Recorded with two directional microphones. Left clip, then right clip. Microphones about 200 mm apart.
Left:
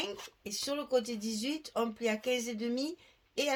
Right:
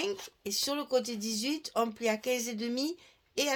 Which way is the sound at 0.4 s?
45° right (ahead or behind).